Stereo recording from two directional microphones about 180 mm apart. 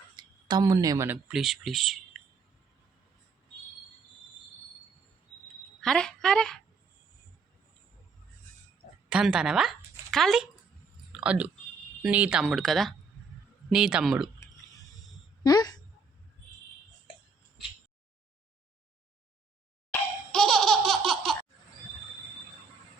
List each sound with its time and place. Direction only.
0.2 s speech: 25° right (ahead or behind); by 2.2 s centre (ahead or behind)
5.8 s a woman's voice: 5° left (ahead or behind)
9.0 s speech: 5° right (ahead or behind)
15.4 s a sound: 20° left (ahead or behind)
19.9 s laughter: 5° left (ahead or behind)